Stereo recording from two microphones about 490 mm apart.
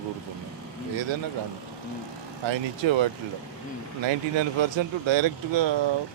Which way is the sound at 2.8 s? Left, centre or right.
Right.